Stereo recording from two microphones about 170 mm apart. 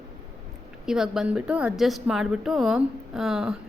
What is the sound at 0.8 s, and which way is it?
A woman's voice, 5° right (ahead or behind).